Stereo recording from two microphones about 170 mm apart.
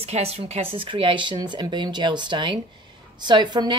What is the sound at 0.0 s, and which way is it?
Speech, 40° right (ahead or behind).